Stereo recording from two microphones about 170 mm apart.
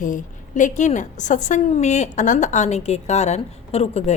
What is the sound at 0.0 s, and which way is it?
A woman's voice, 50° left (ahead or behind).